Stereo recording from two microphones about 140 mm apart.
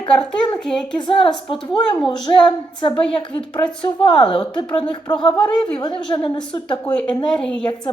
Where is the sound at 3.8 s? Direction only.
35° left (ahead or behind).